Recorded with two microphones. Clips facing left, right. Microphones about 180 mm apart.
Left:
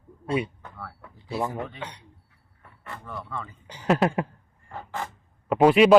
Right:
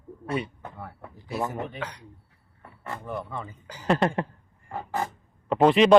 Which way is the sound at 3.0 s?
20° right (ahead or behind).